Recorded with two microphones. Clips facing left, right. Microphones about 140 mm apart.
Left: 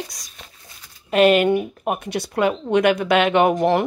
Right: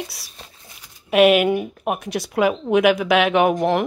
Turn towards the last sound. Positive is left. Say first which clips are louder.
# even
turn(degrees=0)  # may be behind; listen again after turning